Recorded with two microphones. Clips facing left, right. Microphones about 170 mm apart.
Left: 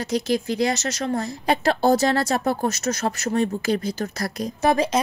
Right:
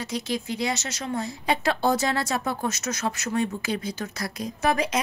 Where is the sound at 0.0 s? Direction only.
40° left (ahead or behind).